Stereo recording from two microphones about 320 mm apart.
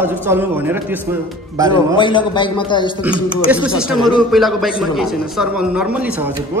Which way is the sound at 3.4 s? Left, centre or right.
Centre.